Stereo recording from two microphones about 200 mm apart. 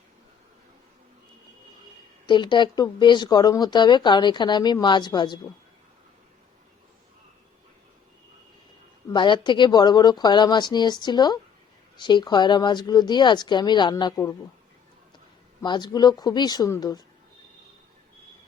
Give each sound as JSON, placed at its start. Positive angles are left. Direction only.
{"t": 2.2, "sound": "speech", "side_deg": 25}
{"t": 9.0, "sound": "speech", "side_deg": 25}
{"t": 15.6, "sound": "speech", "side_deg": 20}